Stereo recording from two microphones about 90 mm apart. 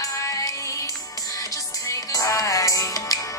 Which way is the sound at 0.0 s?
40° left (ahead or behind).